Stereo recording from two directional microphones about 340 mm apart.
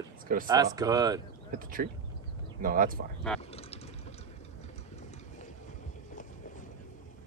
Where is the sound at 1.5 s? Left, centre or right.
Right.